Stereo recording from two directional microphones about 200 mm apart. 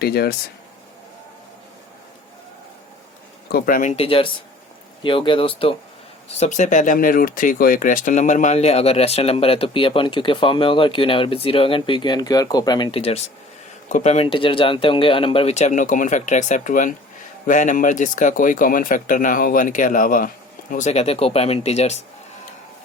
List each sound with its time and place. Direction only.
0.0 s speech: 50° left (ahead or behind)
3.5 s speech: 45° left (ahead or behind)